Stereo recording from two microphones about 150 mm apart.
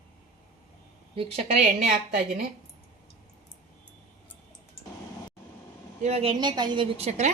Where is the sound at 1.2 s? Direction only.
40° right (ahead or behind).